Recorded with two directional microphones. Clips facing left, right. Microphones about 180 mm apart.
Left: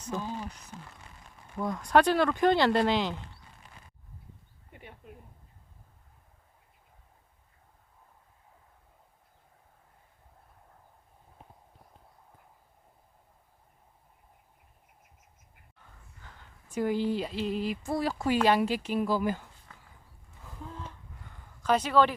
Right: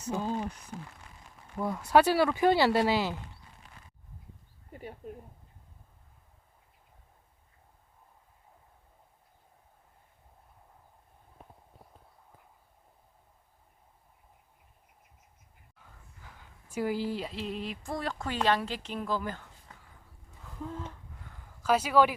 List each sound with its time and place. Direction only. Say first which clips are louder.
0.1 s speech: right 1 dB; 10° right (ahead or behind)
1.5 s speech: even; 5° right (ahead or behind)
4.7 s speech: right 7 dB; 40° right (ahead or behind)
15.8 s speech: even; 5° right (ahead or behind); by 19.5 s 10° left (ahead or behind)
21.6 s speech: even; 5° right (ahead or behind)